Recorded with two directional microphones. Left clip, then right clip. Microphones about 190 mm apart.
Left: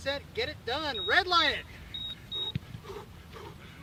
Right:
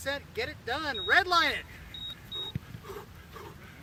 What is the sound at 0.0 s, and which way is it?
Speech, 10° right (ahead or behind).